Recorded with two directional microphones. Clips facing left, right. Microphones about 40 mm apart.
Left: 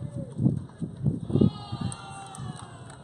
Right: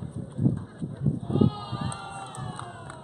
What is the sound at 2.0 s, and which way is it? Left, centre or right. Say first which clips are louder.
Run: right 4 dB; centre.